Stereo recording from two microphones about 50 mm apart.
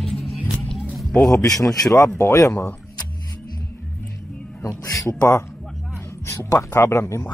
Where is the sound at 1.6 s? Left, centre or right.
Left.